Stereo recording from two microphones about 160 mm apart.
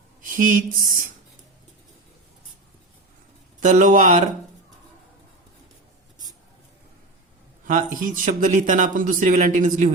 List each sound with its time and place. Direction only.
0.2 s speech: 55° right (ahead or behind)
3.6 s speech: 50° right (ahead or behind)
7.6 s speech: 55° right (ahead or behind)